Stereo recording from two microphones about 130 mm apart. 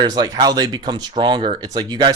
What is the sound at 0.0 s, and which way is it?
Speech, 30° right (ahead or behind).